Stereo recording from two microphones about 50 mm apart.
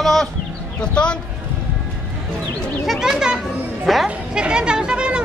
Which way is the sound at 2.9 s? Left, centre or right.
Centre.